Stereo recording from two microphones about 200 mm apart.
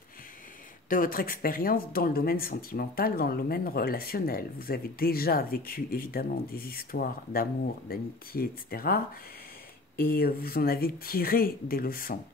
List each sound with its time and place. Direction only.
0.8 s speech: 45° left (ahead or behind)